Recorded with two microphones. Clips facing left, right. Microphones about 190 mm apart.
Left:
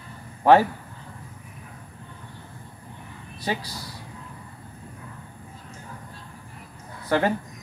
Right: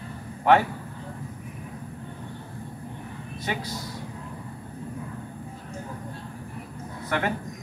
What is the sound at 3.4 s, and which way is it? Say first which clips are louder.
Speech: left 2 dB; 35° left (ahead or behind).